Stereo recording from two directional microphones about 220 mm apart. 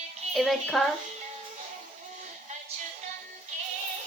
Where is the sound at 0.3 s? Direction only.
Centre (ahead or behind).